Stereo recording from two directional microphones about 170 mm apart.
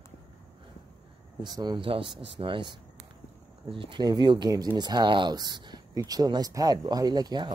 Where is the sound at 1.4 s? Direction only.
25° right (ahead or behind).